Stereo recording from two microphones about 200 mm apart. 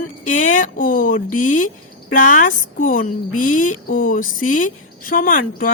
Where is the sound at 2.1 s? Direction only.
40° left (ahead or behind).